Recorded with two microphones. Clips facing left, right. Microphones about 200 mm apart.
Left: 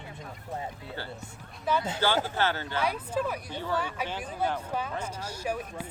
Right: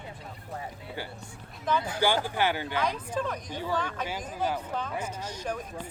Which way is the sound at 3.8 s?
10° left (ahead or behind).